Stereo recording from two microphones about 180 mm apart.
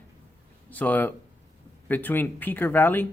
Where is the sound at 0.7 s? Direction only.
10° left (ahead or behind).